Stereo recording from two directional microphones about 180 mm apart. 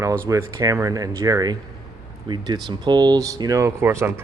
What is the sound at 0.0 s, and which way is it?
Speech, 15° right (ahead or behind).